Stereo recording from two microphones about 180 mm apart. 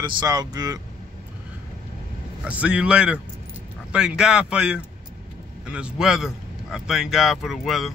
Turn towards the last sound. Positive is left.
turn(degrees=0)  # may be behind; listen again after turning